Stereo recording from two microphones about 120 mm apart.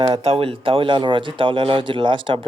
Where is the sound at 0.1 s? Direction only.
55° right (ahead or behind).